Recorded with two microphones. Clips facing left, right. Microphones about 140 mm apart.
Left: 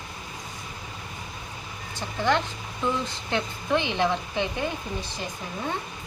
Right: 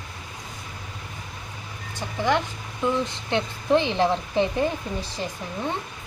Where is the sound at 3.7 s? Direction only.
35° right (ahead or behind).